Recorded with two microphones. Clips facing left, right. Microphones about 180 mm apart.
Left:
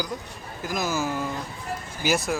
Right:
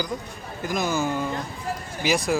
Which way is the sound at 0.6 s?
5° left (ahead or behind).